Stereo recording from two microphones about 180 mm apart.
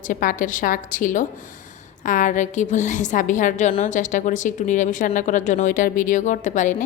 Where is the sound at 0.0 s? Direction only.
45° left (ahead or behind).